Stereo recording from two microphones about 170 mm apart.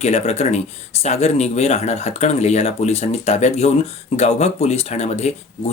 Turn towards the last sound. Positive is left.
turn(degrees=40)  # may be behind; listen again after turning